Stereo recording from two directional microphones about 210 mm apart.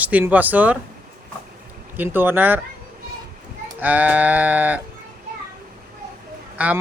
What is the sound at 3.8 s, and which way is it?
Speech, 10° right (ahead or behind).